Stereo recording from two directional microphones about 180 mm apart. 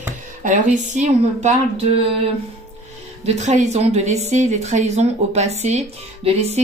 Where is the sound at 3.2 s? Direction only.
40° right (ahead or behind).